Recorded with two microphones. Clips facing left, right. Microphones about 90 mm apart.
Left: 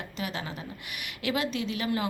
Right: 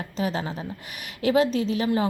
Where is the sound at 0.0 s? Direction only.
35° right (ahead or behind).